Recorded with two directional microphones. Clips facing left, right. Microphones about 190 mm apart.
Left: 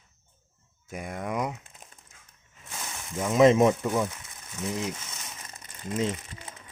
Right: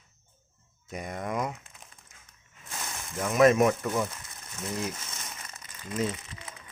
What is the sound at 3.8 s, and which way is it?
Speech, 10° left (ahead or behind).